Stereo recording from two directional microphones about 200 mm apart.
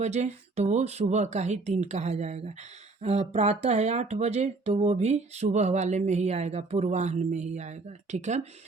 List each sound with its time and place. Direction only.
0.0 s speech: 35° right (ahead or behind)